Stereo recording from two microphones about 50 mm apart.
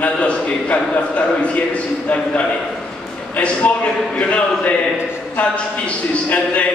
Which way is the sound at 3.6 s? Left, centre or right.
Left.